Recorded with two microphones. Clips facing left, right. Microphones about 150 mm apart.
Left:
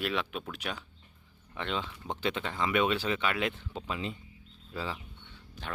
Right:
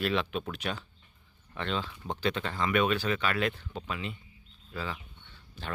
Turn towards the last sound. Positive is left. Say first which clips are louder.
# even
turn(degrees=25)  # may be behind; listen again after turning